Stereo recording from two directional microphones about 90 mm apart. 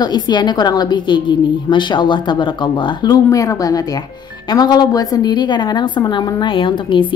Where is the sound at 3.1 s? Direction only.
35° left (ahead or behind).